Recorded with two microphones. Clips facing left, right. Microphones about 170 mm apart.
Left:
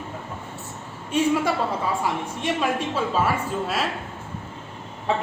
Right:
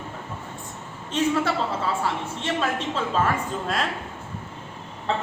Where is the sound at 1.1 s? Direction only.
10° left (ahead or behind).